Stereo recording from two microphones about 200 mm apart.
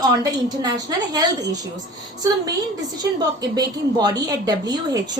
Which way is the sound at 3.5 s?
20° right (ahead or behind).